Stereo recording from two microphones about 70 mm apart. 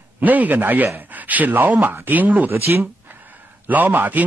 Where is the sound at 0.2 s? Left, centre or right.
Right.